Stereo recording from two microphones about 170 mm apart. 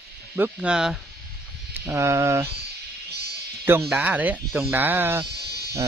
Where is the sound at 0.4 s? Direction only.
5° right (ahead or behind).